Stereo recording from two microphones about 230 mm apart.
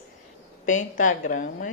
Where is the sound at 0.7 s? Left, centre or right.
Left.